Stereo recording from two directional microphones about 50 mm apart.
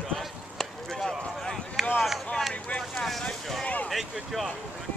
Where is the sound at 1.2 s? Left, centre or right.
Centre.